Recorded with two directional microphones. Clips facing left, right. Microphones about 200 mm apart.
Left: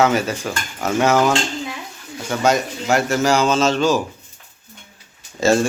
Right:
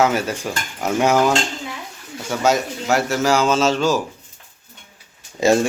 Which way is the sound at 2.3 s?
5° right (ahead or behind).